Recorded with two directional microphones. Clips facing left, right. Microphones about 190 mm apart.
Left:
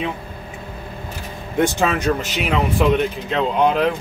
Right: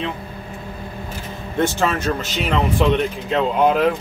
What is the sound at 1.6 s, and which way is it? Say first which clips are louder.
Speech: left 1 dB; 15° left (ahead or behind).